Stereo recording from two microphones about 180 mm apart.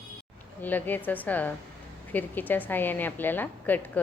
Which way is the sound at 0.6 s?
10° left (ahead or behind).